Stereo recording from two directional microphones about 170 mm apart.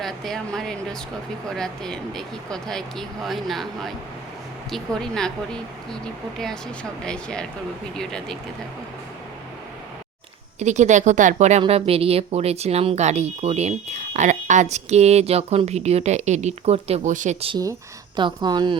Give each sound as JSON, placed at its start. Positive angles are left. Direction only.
{"t": 0.0, "sound": "speech", "side_deg": 0}
{"t": 7.0, "sound": "speech", "side_deg": 5}
{"t": 10.6, "sound": "speech", "side_deg": -45}
{"t": 18.2, "sound": "speech", "side_deg": -25}